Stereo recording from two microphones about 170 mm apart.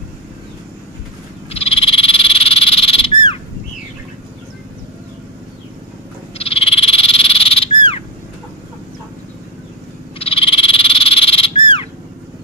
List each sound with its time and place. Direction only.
1.5 s frog: 35° left (ahead or behind)
6.3 s frog: 35° left (ahead or behind)
10.1 s frog: 35° left (ahead or behind)